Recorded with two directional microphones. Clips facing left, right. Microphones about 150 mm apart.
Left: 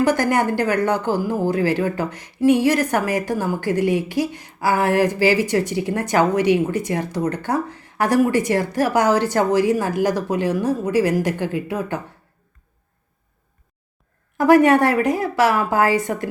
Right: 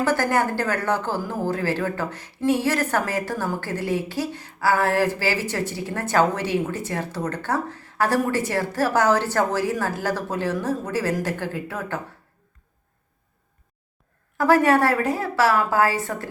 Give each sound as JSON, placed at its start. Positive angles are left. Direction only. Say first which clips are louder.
{"t": 0.0, "sound": "speech", "louder": "left 3 dB", "side_deg": 15}
{"t": 14.3, "sound": "speech", "louder": "left 4 dB", "side_deg": 20}